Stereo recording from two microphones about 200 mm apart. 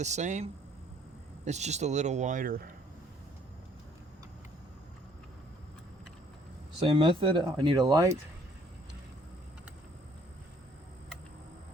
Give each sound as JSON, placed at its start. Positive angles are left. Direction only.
{"t": 0.0, "sound": "speech", "side_deg": -35}
{"t": 6.7, "sound": "speech", "side_deg": -25}